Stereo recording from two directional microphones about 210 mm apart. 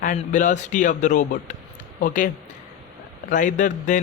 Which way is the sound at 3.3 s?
35° left (ahead or behind).